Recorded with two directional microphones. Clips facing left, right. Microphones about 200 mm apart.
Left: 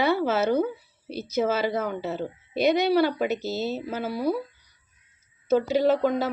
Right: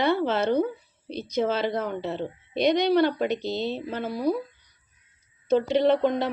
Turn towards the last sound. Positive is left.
turn(degrees=5)  # may be behind; listen again after turning